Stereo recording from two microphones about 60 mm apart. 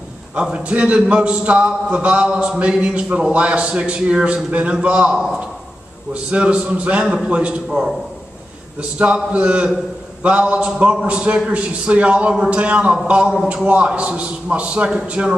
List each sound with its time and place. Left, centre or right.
0.4 s a man's voice: centre
6.3 s a man's voice: centre
8.9 s a man's voice: right